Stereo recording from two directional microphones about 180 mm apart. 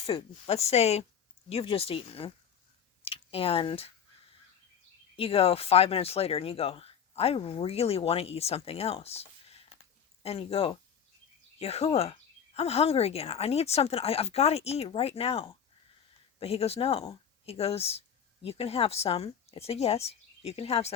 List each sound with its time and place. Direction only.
0.0 s speech: 35° left (ahead or behind)
5.1 s speech: 30° left (ahead or behind)